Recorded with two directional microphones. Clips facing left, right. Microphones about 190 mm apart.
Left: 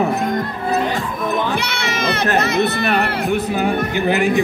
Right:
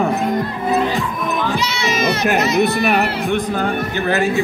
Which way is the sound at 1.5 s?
60° left (ahead or behind).